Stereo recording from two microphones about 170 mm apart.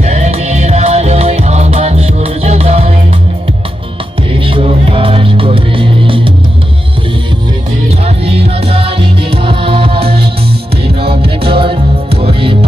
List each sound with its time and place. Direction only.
0.0 s music: 40° right (ahead or behind)
4.3 s music: 30° right (ahead or behind)
8.0 s music: 35° right (ahead or behind)